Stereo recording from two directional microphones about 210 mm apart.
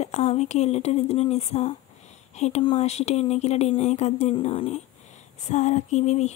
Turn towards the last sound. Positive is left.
turn(degrees=30)  # may be behind; listen again after turning